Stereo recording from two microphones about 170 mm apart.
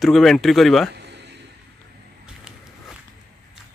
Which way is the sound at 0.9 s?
85° right.